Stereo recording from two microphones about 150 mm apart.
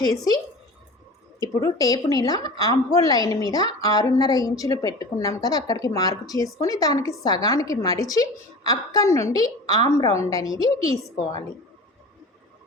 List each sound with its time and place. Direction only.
1.4 s a woman's voice: 25° left (ahead or behind)